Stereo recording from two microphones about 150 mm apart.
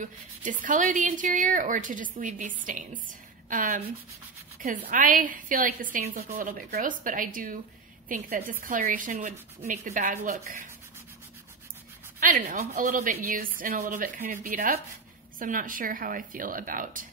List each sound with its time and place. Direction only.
0.0 s a woman's voice: 60° right (ahead or behind)
4.8 s a woman's voice: 65° right (ahead or behind)
12.2 s a woman's voice: 65° right (ahead or behind)